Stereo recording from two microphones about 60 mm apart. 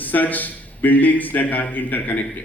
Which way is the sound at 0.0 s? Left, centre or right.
Left.